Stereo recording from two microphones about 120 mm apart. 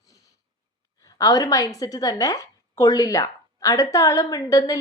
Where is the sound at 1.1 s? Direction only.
30° left (ahead or behind).